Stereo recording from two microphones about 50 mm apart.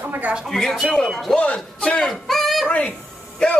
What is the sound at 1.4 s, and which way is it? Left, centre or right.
Speech, left.